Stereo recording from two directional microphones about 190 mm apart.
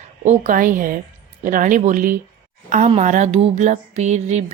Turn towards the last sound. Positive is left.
turn(degrees=-35)  # may be behind; listen again after turning